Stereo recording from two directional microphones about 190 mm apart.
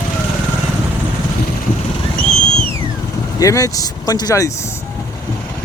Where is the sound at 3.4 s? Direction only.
15° left (ahead or behind).